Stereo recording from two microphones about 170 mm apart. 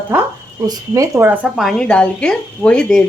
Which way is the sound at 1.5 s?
Centre (ahead or behind).